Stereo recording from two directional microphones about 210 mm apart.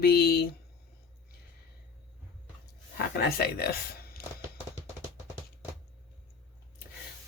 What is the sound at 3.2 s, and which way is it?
Speech, 50° left (ahead or behind).